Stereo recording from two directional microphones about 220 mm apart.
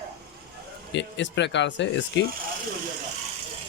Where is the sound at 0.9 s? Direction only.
55° left (ahead or behind).